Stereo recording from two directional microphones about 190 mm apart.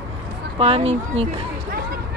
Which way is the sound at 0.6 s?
30° right (ahead or behind).